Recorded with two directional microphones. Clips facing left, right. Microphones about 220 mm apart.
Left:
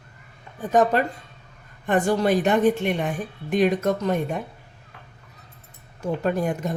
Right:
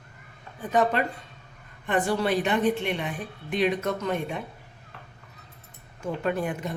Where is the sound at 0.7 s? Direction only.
45° left (ahead or behind).